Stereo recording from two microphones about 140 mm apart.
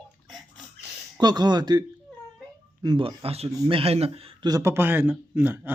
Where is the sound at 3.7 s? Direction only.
45° right (ahead or behind).